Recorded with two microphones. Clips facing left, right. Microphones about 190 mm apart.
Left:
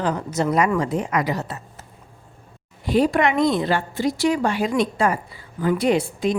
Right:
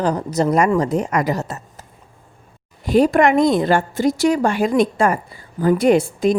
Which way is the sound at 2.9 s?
45° right (ahead or behind).